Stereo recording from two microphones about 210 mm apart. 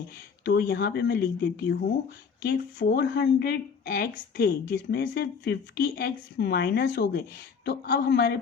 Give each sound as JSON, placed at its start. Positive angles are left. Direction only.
{"t": 0.4, "sound": "speech", "side_deg": 50}